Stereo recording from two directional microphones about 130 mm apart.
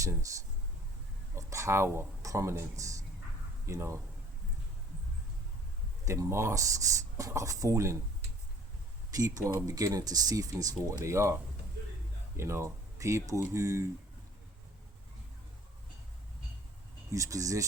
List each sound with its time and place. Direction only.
1.4 s speech: 25° right (ahead or behind)
6.1 s speech: 20° right (ahead or behind)
9.1 s speech: 30° right (ahead or behind)
12.4 s speech: 20° right (ahead or behind)
17.1 s speech: 25° right (ahead or behind)